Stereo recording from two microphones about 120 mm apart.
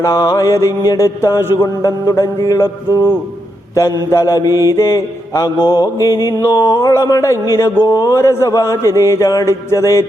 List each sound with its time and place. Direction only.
0.0 s speech: 30° left (ahead or behind)